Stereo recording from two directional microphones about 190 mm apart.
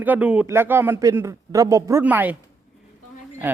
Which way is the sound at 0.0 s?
10° right (ahead or behind).